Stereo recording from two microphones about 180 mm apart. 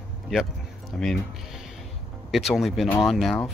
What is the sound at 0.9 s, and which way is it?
Speech, 5° left (ahead or behind).